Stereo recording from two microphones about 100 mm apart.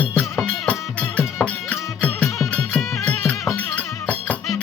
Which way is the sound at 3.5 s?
15° left (ahead or behind).